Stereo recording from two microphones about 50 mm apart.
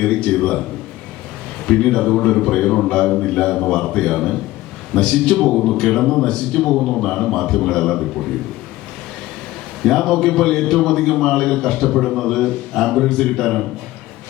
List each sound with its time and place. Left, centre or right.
0.0 s a man's voice: left
1.6 s a man's voice: centre
9.8 s a man's voice: centre